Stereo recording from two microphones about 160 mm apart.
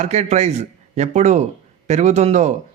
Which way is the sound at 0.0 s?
45° right (ahead or behind).